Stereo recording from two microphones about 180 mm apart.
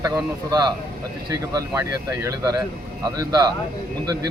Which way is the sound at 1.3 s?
20° right (ahead or behind).